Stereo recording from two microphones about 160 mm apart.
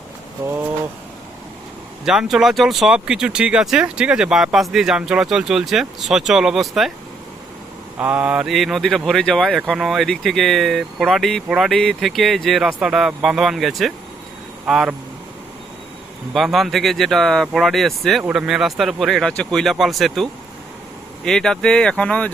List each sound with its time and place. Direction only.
0.4 s speech: 15° right (ahead or behind)
2.0 s speech: 5° right (ahead or behind)
7.9 s speech: 10° right (ahead or behind)
16.3 s speech: centre (ahead or behind)